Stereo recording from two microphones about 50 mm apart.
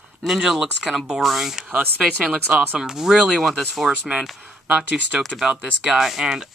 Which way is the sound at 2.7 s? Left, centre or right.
Centre.